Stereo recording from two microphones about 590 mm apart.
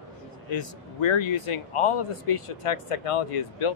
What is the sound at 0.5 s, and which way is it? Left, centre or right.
Speech, left.